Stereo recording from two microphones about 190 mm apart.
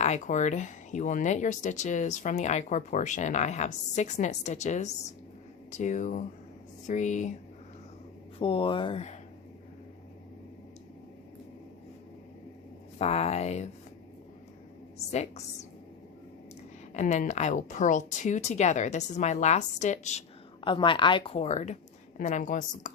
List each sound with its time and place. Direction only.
0.0 s speech: 40° left (ahead or behind)
8.4 s speech: 30° left (ahead or behind)
13.0 s speech: 35° left (ahead or behind)
14.9 s a woman's voice: 35° left (ahead or behind)
16.9 s speech: 40° left (ahead or behind)
20.7 s speech: 25° left (ahead or behind)